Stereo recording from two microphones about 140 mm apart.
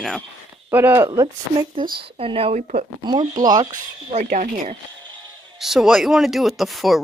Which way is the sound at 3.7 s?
65° right (ahead or behind).